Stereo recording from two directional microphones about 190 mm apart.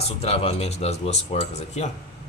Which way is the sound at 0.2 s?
30° left (ahead or behind).